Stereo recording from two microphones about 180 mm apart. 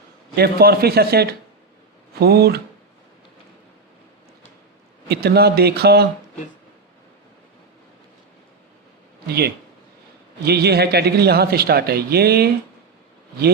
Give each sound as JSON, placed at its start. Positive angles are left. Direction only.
{"t": 0.3, "sound": "speech", "side_deg": -60}
{"t": 5.0, "sound": "speech", "side_deg": -65}
{"t": 10.4, "sound": "speech", "side_deg": -65}